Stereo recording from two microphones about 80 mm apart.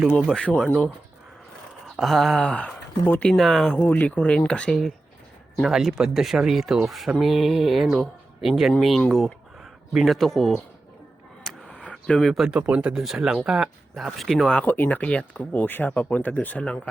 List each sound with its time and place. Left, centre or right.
0.2 s speech: centre
2.0 s speech: centre
3.3 s speech: centre
3.8 s speech: left
5.6 s speech: centre
11.6 s a sound: centre
12.2 s speech: centre
12.5 s speech: centre
14.6 s speech: left